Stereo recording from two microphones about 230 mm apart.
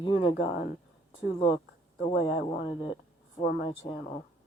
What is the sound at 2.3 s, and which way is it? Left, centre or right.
Speech, left.